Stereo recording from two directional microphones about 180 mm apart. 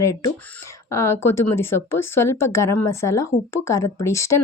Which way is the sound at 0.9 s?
15° left (ahead or behind).